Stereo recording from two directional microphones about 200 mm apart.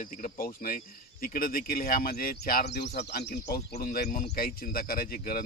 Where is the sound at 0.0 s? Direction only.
45° left (ahead or behind).